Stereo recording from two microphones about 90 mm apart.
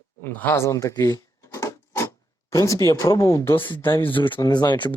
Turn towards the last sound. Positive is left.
turn(degrees=55)  # may be behind; listen again after turning